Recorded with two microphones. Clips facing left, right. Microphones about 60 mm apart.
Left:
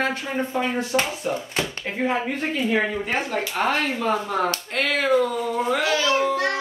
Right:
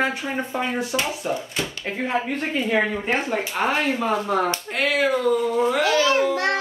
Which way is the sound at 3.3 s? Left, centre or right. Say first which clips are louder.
Even; centre.